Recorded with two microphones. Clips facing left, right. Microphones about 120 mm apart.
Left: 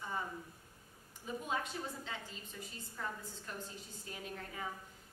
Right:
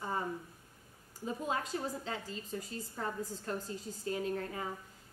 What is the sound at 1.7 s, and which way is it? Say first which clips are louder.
A woman's voice: right 6 dB; 40° right (ahead or behind).